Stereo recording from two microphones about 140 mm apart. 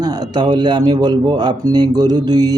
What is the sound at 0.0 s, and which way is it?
Speech, 30° right (ahead or behind).